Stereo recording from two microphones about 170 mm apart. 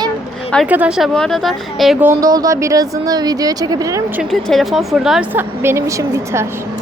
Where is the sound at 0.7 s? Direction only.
5° right (ahead or behind).